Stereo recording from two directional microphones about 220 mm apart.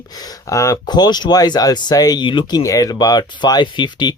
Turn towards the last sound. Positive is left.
turn(degrees=20)  # may be behind; listen again after turning